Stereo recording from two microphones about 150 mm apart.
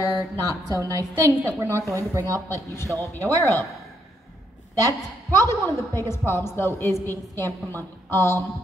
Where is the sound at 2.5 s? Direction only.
15° left (ahead or behind).